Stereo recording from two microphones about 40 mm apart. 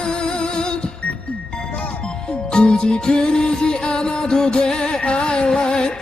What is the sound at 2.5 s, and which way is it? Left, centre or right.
Music, left.